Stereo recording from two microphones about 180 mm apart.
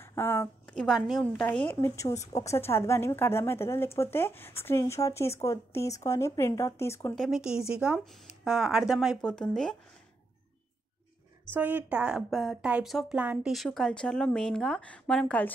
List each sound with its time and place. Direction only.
0.0 s a woman's voice: 15° left (ahead or behind)
7.2 s a woman's voice: centre (ahead or behind)
11.5 s a woman's voice: 10° right (ahead or behind); by 15.5 s 5° left (ahead or behind)